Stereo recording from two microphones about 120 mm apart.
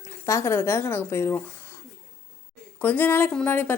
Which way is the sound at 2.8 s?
15° left (ahead or behind).